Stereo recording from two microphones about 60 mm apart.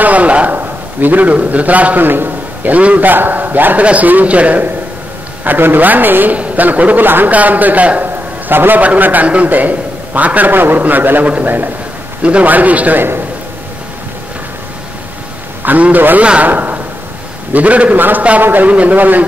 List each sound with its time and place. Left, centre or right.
0.0 s a man's voice: right
15.6 s a man's voice: right